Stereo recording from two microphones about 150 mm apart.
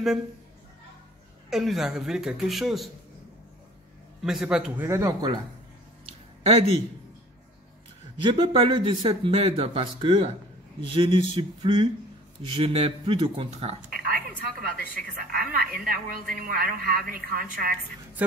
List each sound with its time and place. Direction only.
1.5 s speech: centre (ahead or behind)
4.2 s speech: 5° right (ahead or behind)
4.8 s speech: 20° right (ahead or behind)
6.0 s a sound: 45° right (ahead or behind)
8.2 s speech: 35° right (ahead or behind)
13.8 s a sound: 80° right
15.0 s a woman's voice: 85° right